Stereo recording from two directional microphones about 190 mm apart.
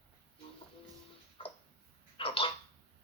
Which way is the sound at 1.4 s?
30° left (ahead or behind).